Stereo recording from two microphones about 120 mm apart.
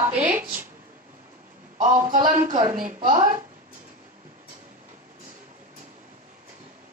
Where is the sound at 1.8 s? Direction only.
90° right.